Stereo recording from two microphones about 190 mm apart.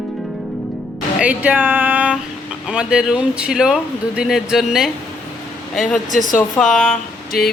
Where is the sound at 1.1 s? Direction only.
5° right (ahead or behind).